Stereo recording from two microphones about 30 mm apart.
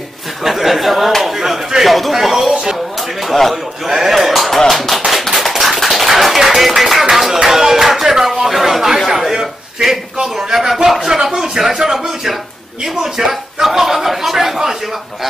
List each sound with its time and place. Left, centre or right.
0.4 s speech: centre
1.9 s speech: centre
2.1 s speech: centre
4.0 s a sound: centre
4.6 s tap: centre
5.3 s a sound: centre
6.0 s music: centre
7.4 s a sound: centre
10.2 s speech: centre